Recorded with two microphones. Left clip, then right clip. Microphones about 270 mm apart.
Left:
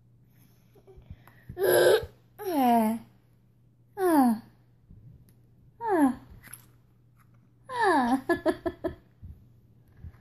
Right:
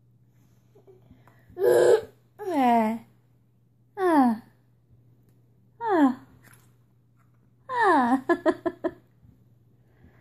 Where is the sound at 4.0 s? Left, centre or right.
Centre.